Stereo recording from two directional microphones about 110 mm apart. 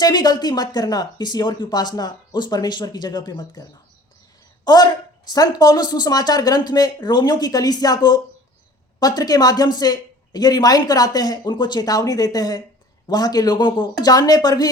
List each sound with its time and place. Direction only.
0.0 s speech: 40° left (ahead or behind)
4.6 s speech: 35° left (ahead or behind)